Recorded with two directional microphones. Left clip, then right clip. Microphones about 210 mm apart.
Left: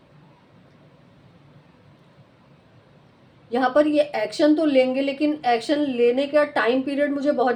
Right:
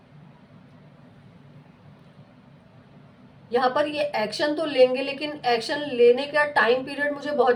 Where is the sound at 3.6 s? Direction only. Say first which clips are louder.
Left 4 dB; 55° left (ahead or behind).